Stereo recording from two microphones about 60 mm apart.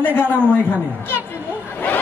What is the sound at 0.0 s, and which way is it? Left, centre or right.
Speech, left.